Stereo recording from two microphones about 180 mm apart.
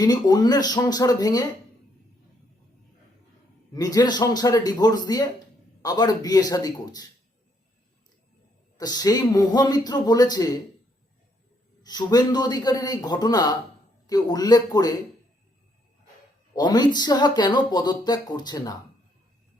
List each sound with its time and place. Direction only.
0.0 s speech: 20° left (ahead or behind)
3.7 s speech: 20° left (ahead or behind)
8.8 s speech: 20° left (ahead or behind)
11.8 s speech: 20° left (ahead or behind)
16.6 s speech: 25° left (ahead or behind)